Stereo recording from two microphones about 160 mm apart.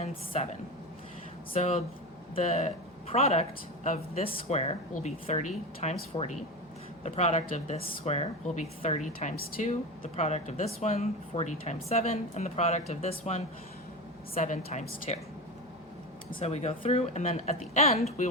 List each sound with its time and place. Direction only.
1.5 s a woman's voice: 40° left (ahead or behind)
16.4 s a woman's voice: 40° left (ahead or behind)